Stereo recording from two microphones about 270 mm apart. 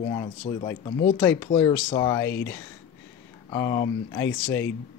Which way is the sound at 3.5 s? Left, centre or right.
Centre.